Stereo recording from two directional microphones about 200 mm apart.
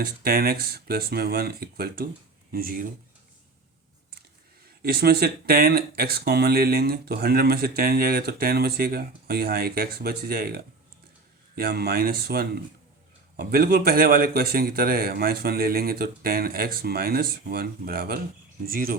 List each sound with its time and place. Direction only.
0.0 s speech: 50° right (ahead or behind)
4.8 s speech: 50° right (ahead or behind)